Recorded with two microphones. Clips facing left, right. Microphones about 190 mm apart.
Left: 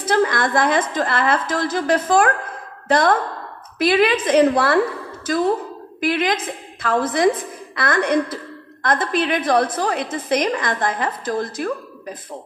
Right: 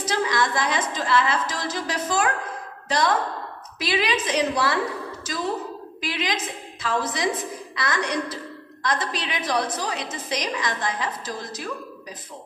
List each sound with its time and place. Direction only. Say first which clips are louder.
0.0 s a woman's voice: left 5 dB; 55° left (ahead or behind)